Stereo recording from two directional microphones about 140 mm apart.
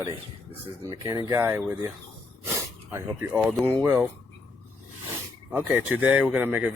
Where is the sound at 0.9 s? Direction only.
25° right (ahead or behind).